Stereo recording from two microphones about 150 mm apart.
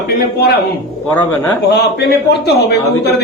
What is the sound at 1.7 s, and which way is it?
Speech, 90° left.